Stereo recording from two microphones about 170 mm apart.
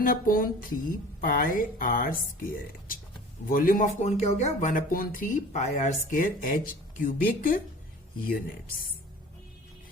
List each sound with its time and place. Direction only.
0.0 s speech: 55° left (ahead or behind)